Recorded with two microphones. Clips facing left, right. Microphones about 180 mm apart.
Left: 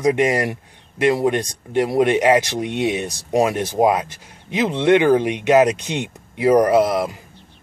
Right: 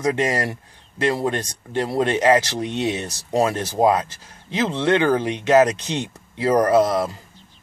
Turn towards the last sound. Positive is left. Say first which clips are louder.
# left 3 dB
turn(degrees=65)  # may be behind; listen again after turning